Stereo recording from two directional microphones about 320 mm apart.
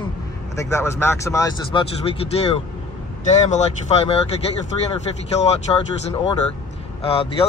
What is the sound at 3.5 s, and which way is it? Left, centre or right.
Speech, centre.